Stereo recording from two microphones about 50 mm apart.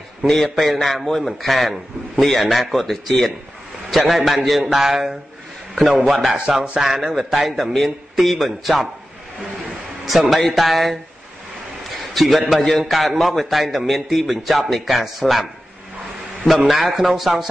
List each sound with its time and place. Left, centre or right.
0.3 s a man's voice: centre
6.3 s music: centre
7.2 s a man's voice: centre
10.0 s a man's voice: centre
12.1 s a man's voice: centre
16.4 s a man's voice: centre